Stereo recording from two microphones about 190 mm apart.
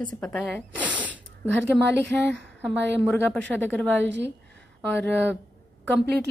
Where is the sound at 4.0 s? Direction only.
70° right (ahead or behind).